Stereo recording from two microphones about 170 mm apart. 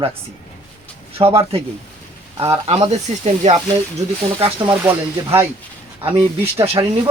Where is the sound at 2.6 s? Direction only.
35° right (ahead or behind).